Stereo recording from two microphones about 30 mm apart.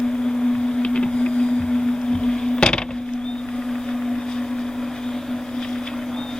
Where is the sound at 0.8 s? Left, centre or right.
Left.